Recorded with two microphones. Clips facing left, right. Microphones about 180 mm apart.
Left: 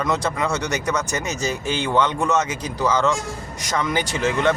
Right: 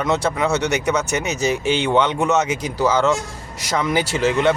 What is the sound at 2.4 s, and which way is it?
Speech, 10° right (ahead or behind).